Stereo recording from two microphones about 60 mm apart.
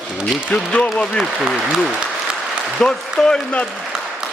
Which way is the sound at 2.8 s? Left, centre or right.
Centre.